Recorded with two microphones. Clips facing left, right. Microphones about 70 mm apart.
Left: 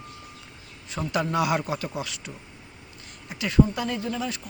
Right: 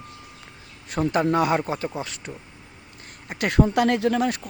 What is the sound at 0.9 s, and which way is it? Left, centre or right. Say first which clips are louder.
Speech: right 5 dB; right.